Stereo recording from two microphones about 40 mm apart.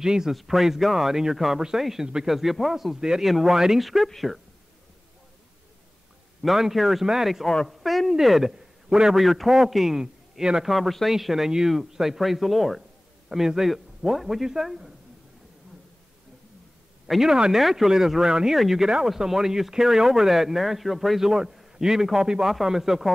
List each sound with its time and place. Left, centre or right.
0.0 s a man's voice: centre
0.3 s speech: centre
3.0 s a man's voice: centre
6.4 s a man's voice: centre
17.2 s a man's voice: centre
21.2 s a man's voice: centre